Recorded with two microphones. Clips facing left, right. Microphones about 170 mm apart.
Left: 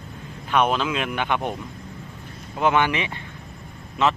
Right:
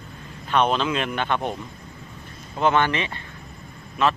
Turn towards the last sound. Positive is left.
turn(degrees=20)  # may be behind; listen again after turning